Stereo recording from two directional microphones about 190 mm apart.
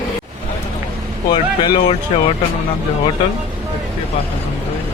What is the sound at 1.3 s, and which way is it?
Speech, 25° left (ahead or behind).